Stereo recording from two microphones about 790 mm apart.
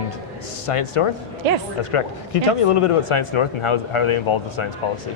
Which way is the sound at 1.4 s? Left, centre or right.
Right.